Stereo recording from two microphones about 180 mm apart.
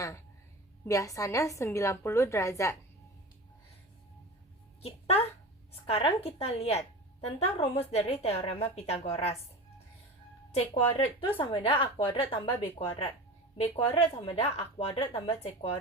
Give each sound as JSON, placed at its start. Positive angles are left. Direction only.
{"t": 0.9, "sound": "a woman's voice", "side_deg": 20}
{"t": 4.8, "sound": "a woman's voice", "side_deg": 35}
{"t": 10.5, "sound": "a woman's voice", "side_deg": 35}
{"t": 12.5, "sound": "a woman's voice", "side_deg": 10}
{"t": 13.6, "sound": "a woman's voice", "side_deg": 30}